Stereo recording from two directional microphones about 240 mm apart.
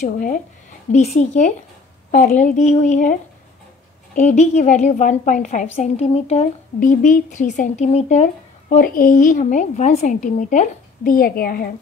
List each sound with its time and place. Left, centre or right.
0.0 s speech: left